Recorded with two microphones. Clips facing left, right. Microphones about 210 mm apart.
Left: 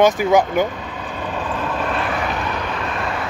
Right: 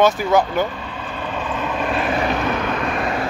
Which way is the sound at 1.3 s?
Centre (ahead or behind).